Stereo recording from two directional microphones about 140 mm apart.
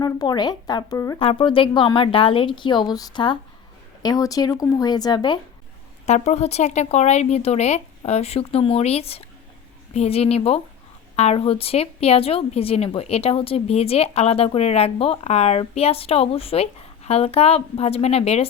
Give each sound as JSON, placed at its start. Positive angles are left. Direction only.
{"t": 0.0, "sound": "speech", "side_deg": 30}
{"t": 1.2, "sound": "a woman's voice", "side_deg": 40}
{"t": 6.1, "sound": "speech", "side_deg": 55}